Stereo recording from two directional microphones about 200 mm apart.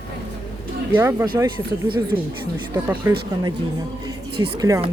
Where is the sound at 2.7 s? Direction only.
10° right (ahead or behind).